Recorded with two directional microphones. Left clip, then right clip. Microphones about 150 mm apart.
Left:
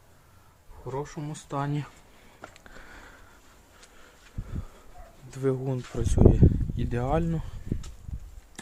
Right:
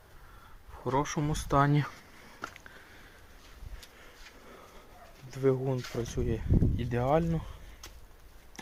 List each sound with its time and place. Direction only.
0.9 s speech: 35° right (ahead or behind)
1.2 s speech: 20° right (ahead or behind)
5.3 s speech: 35° left (ahead or behind)